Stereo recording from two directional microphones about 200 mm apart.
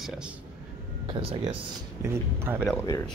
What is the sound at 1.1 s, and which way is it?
Speech, 30° right (ahead or behind).